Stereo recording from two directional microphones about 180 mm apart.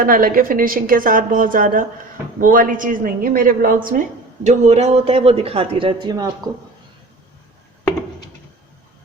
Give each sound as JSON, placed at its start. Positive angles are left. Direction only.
{"t": 0.0, "sound": "a woman's voice", "side_deg": -50}
{"t": 4.4, "sound": "speech", "side_deg": -40}